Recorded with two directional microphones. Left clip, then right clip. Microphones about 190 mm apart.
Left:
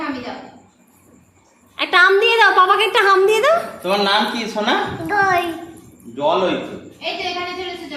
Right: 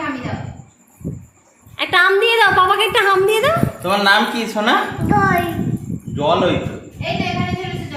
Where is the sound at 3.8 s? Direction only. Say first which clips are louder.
Right 6 dB; 45° right (ahead or behind).